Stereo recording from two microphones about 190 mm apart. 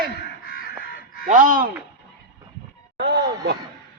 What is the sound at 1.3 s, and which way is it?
Speech, 45° right (ahead or behind).